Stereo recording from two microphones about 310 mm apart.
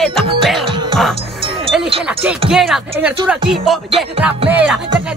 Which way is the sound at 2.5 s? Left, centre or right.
Centre.